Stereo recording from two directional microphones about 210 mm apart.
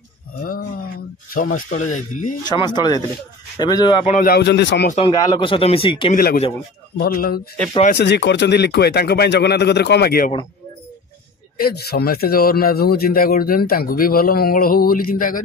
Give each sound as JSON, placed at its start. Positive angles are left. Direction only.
{"t": 1.3, "sound": "speech", "side_deg": 40}
{"t": 2.4, "sound": "a man's voice", "side_deg": 20}
{"t": 4.2, "sound": "speech", "side_deg": 50}
{"t": 4.8, "sound": "speech", "side_deg": 30}
{"t": 5.1, "sound": "a man's voice", "side_deg": 20}
{"t": 6.1, "sound": "speech", "side_deg": 45}
{"t": 11.6, "sound": "speech", "side_deg": 50}